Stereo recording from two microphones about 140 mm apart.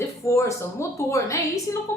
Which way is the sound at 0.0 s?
20° left (ahead or behind).